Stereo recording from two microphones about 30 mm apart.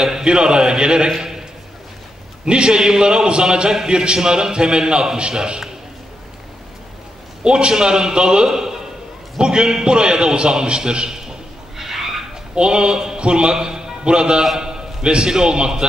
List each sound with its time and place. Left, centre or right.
0.0 s a man's voice: centre
0.3 s a man's voice: right
2.4 s a man's voice: right
7.4 s a man's voice: right
9.4 s a man's voice: right
11.1 s a sound: centre
12.5 s a man's voice: right